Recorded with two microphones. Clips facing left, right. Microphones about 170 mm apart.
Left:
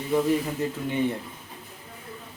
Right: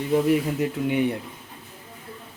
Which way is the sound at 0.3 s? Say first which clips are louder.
Right 3 dB; 10° right (ahead or behind).